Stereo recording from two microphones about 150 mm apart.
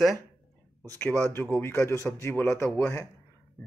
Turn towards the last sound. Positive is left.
turn(degrees=15)  # may be behind; listen again after turning